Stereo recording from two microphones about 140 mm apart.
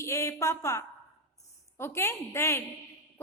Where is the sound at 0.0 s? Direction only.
20° left (ahead or behind).